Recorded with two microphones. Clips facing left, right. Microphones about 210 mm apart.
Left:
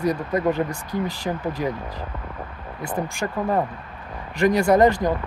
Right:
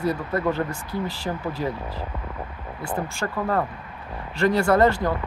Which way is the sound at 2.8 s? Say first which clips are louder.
Left 2 dB; 15° left (ahead or behind).